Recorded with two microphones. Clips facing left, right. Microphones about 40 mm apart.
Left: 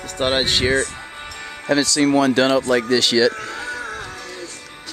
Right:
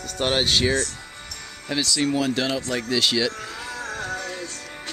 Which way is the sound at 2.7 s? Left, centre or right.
Left.